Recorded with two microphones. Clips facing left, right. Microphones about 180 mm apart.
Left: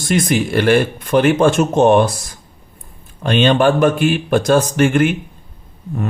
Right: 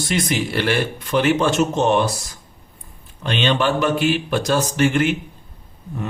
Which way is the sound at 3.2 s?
50° left (ahead or behind).